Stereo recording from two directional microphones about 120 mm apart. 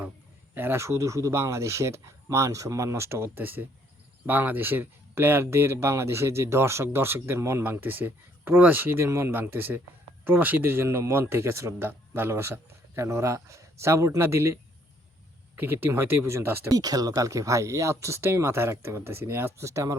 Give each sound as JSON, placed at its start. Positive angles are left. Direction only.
{"t": 0.5, "sound": "speech", "side_deg": -20}